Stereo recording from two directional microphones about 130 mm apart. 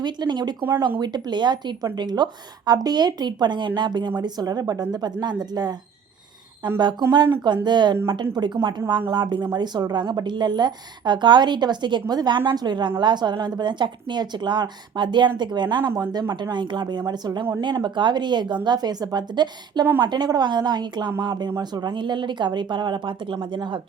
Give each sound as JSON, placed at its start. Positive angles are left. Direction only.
{"t": 0.0, "sound": "a woman's voice", "side_deg": -35}
{"t": 15.9, "sound": "a woman's voice", "side_deg": -25}